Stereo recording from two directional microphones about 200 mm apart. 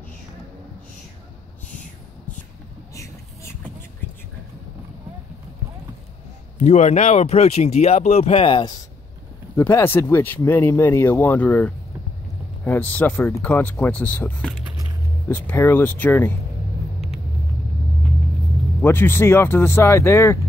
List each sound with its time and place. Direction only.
6.6 s speech: 35° left (ahead or behind)
9.6 s speech: 10° left (ahead or behind)
18.8 s speech: 10° left (ahead or behind)